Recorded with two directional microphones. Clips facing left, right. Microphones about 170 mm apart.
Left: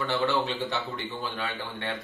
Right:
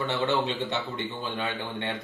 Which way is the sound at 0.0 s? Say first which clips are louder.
Even; 20° right (ahead or behind).